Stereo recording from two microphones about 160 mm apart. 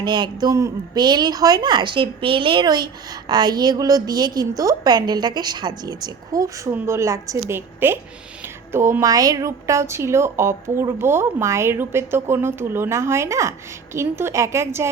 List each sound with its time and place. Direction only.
0.0 s a woman's voice: 30° right (ahead or behind)